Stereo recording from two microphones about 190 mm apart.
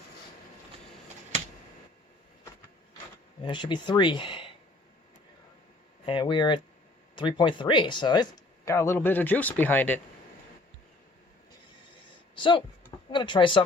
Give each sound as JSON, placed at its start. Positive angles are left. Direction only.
{"t": 3.4, "sound": "speech", "side_deg": 25}
{"t": 6.1, "sound": "speech", "side_deg": 25}
{"t": 12.4, "sound": "speech", "side_deg": 25}